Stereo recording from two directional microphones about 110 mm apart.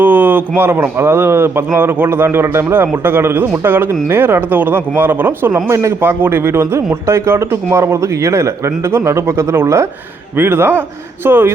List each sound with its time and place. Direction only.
0.0 s speech: 20° right (ahead or behind)